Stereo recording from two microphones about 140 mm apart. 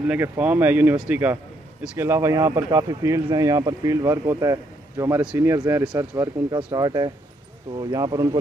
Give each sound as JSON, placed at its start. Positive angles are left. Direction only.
{"t": 0.0, "sound": "a man's voice", "side_deg": -10}
{"t": 5.2, "sound": "speech", "side_deg": -10}
{"t": 5.5, "sound": "a man's voice", "side_deg": -20}